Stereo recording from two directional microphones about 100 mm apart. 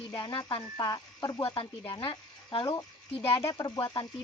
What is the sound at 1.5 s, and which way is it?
Speech, 60° left (ahead or behind).